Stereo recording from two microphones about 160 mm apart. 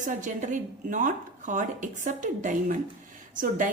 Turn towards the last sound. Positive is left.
turn(degrees=-55)  # may be behind; listen again after turning